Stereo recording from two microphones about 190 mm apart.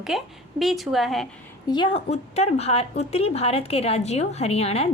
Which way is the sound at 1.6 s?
25° left (ahead or behind).